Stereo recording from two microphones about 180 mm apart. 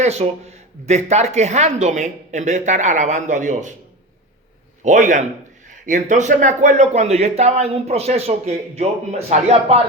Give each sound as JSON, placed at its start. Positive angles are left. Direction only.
{"t": 0.0, "sound": "speech", "side_deg": -35}
{"t": 4.8, "sound": "a man's voice", "side_deg": -45}